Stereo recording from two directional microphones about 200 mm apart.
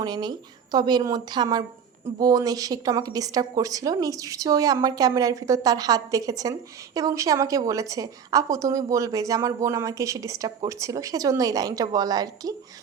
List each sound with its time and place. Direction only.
0.0 s a woman's voice: 20° right (ahead or behind)